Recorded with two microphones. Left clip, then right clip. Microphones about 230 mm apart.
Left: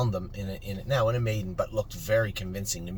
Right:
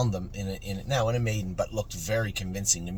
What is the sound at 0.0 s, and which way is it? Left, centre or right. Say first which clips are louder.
Speech: even; centre.